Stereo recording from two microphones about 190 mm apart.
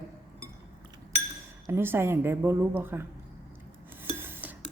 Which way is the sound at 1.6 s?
15° right (ahead or behind).